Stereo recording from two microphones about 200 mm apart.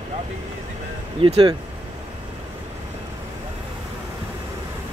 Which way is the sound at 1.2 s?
25° right (ahead or behind).